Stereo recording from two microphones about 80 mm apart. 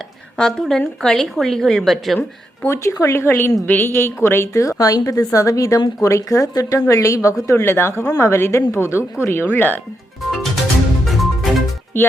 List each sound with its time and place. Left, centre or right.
0.3 s a woman's voice: centre
2.6 s a woman's voice: left
6.7 s a woman's voice: left
10.3 s music: centre